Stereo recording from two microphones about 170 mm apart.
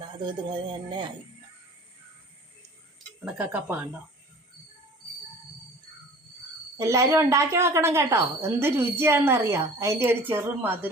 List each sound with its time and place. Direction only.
0.3 s speech: 25° right (ahead or behind)
3.2 s a woman's voice: 5° right (ahead or behind)
6.7 s a woman's voice: 15° right (ahead or behind)